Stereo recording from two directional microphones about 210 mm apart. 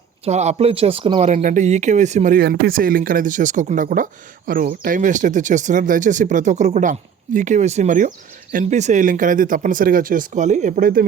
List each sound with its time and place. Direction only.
0.3 s speech: 30° right (ahead or behind)